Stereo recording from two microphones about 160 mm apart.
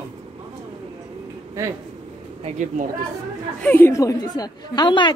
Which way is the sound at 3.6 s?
10° left (ahead or behind).